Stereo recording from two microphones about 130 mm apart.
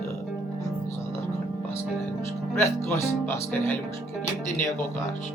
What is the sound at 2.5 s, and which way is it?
Speech, 20° left (ahead or behind).